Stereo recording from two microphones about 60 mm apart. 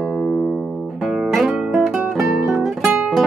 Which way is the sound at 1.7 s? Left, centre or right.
Centre.